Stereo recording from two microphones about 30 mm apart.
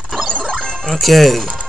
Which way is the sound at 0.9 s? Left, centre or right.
Centre.